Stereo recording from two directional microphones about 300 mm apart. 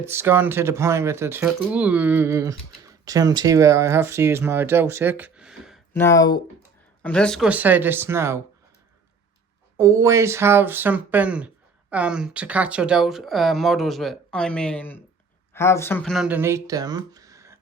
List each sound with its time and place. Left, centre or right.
0.0 s speech: centre
9.7 s speech: centre